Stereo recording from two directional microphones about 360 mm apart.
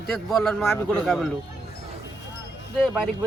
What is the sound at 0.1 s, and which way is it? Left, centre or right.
A man's voice, centre.